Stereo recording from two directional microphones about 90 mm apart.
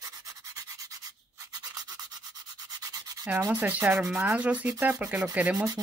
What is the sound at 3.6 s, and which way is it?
Sanding, 20° right (ahead or behind).